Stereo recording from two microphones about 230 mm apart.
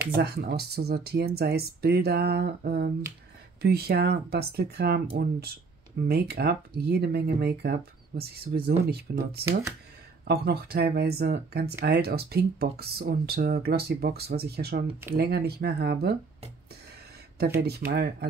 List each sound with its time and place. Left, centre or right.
0.1 s speech: right
17.6 s speech: right